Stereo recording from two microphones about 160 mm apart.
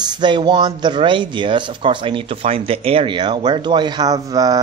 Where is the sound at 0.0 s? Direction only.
30° right (ahead or behind).